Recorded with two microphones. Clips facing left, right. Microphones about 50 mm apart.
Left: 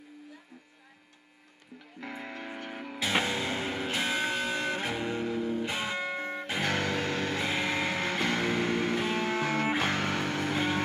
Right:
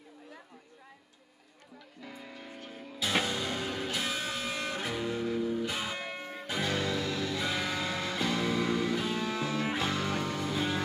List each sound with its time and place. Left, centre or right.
2.0 s music: left
3.0 s music: left
6.2 s music: left